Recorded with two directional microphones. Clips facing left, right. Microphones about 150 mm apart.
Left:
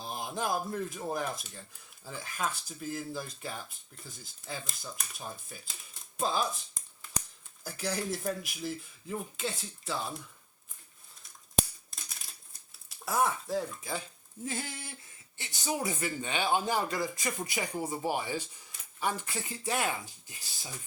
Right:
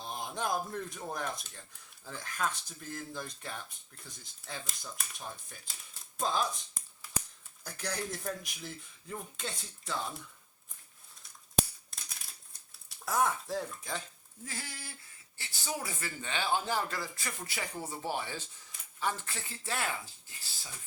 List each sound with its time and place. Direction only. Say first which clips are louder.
0.0 s speech: left 2 dB; 5° left (ahead or behind)
7.6 s speech: left 4 dB; 5° left (ahead or behind)
13.1 s speech: left 1 dB; 5° left (ahead or behind)
14.4 s a sound: left 7 dB; 20° left (ahead or behind)
15.4 s speech: left 5 dB; 20° left (ahead or behind)